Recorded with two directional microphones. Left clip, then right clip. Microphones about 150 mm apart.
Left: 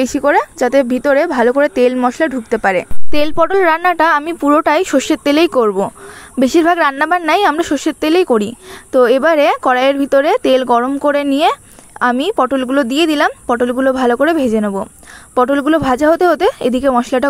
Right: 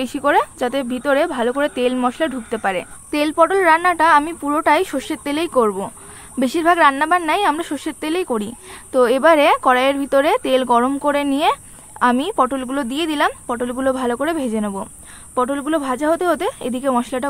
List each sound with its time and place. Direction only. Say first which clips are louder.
0.0 s a woman's voice: left 4 dB; 35° left (ahead or behind)
3.1 s a woman's voice: left 1 dB; 55° left (ahead or behind); by 17.3 s 35° left (ahead or behind)